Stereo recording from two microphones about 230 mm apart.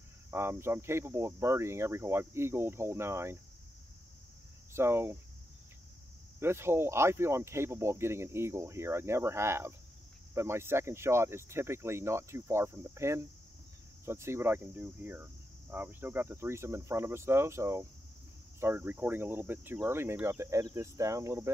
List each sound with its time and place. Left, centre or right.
0.3 s speech: centre
4.7 s speech: centre
6.4 s speech: centre